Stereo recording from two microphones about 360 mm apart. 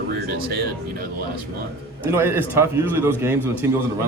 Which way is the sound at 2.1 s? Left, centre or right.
Centre.